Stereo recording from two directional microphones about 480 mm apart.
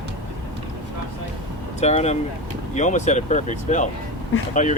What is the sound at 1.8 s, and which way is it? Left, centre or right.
Speech, centre.